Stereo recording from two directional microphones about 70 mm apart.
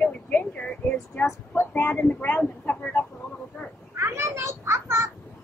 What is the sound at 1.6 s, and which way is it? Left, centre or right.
Speech, left.